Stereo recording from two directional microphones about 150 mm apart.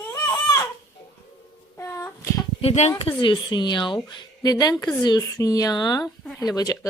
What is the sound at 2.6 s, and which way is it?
Speech, 45° left (ahead or behind).